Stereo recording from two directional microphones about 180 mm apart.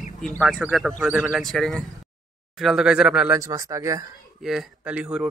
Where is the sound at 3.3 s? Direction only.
20° right (ahead or behind).